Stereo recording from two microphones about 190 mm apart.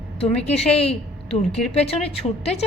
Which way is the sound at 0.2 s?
35° left (ahead or behind).